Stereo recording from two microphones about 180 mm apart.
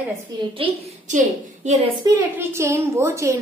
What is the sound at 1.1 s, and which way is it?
Speech, 40° right (ahead or behind).